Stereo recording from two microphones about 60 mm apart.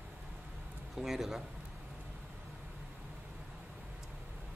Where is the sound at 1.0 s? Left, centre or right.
Centre.